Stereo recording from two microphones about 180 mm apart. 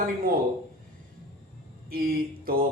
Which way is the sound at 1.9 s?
55° right (ahead or behind).